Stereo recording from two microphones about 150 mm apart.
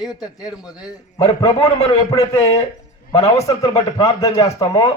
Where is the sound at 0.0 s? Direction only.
25° left (ahead or behind).